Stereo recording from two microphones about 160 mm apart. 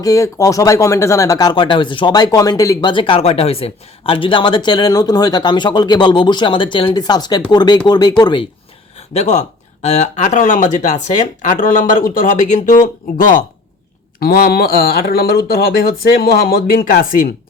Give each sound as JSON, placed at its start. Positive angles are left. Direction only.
{"t": 0.0, "sound": "speech", "side_deg": 20}
{"t": 9.0, "sound": "speech", "side_deg": 45}
{"t": 14.2, "sound": "speech", "side_deg": 65}